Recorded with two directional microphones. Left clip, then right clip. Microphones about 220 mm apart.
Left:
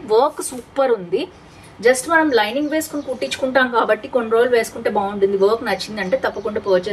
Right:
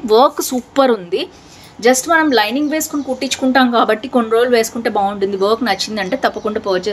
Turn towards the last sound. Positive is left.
turn(degrees=-50)  # may be behind; listen again after turning